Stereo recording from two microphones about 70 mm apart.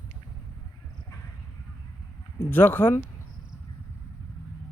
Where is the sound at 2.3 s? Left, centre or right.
Left.